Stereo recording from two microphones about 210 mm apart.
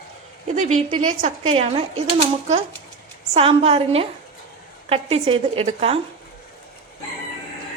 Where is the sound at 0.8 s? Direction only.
35° right (ahead or behind).